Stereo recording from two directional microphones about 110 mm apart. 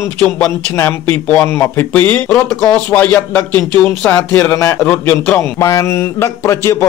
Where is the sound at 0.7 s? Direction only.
20° left (ahead or behind).